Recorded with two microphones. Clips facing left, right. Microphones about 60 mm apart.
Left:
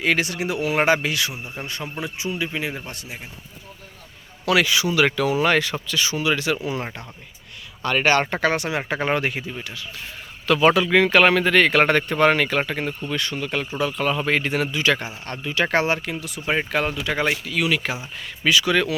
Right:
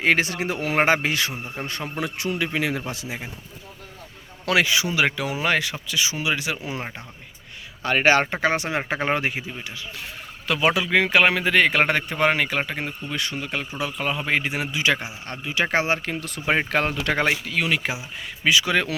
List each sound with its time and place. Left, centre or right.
0.0 s speech: right
2.0 s speech: right
4.4 s speech: right
7.9 s a man's voice: right
10.4 s a man's voice: centre
16.0 s a man's voice: right